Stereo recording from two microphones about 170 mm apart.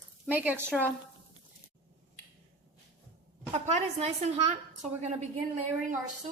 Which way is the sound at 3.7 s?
40° right (ahead or behind).